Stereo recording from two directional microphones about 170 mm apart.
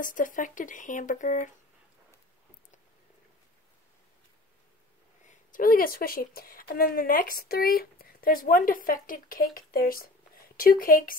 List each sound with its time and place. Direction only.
0.0 s speech: 50° left (ahead or behind)
5.2 s speech: 50° left (ahead or behind)